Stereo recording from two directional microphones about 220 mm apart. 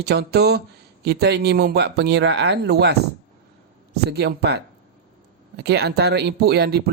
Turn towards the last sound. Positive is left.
turn(degrees=-45)  # may be behind; listen again after turning